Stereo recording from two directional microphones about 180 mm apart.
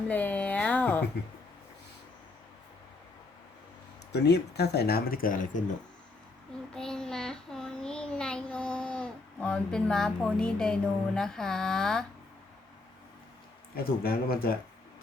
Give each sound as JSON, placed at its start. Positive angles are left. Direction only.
{"t": 0.1, "sound": "speech", "side_deg": 10}
{"t": 4.1, "sound": "speech", "side_deg": 65}
{"t": 6.7, "sound": "child singing", "side_deg": 5}
{"t": 13.7, "sound": "speech", "side_deg": 55}